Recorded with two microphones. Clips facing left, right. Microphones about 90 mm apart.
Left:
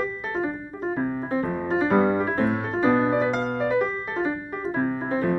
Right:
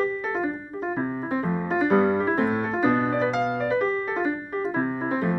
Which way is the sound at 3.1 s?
5° left (ahead or behind).